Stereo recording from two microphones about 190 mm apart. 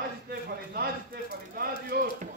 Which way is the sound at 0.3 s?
55° right (ahead or behind).